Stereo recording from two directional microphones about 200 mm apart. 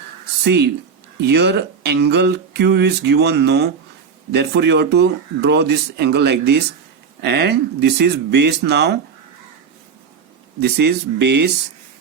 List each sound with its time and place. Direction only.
0.4 s speech: 55° right (ahead or behind)
10.6 s speech: 55° right (ahead or behind)